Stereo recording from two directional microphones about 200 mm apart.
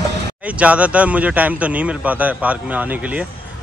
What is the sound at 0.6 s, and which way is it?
A man's voice, 5° right (ahead or behind).